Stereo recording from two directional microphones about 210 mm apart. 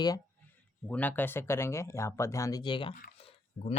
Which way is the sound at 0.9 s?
5° left (ahead or behind).